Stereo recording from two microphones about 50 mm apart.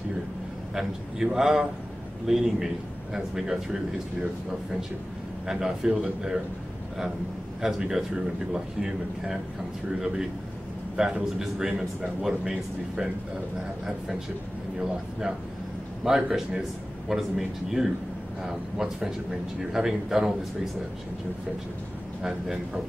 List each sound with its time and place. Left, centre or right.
0.7 s a man's voice: centre
5.5 s a man's voice: centre
7.6 s a man's voice: centre
14.8 s a man's voice: centre